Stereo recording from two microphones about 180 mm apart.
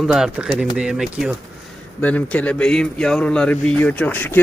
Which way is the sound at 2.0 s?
10° left (ahead or behind).